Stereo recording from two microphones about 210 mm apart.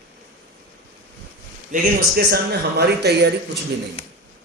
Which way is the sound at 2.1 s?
50° right (ahead or behind).